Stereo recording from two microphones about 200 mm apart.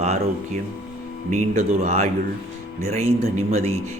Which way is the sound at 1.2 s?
35° right (ahead or behind).